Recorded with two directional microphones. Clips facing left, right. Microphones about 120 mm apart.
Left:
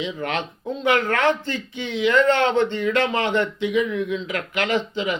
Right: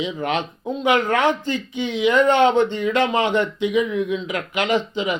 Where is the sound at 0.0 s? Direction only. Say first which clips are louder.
Right 3 dB; 15° right (ahead or behind).